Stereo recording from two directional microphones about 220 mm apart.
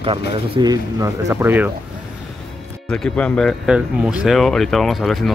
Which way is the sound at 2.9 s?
5° left (ahead or behind).